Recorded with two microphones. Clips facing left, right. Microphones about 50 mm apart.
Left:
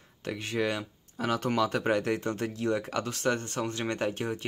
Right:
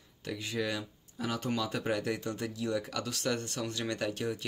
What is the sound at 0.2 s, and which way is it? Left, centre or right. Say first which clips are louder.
A man's voice: left 4 dB; left.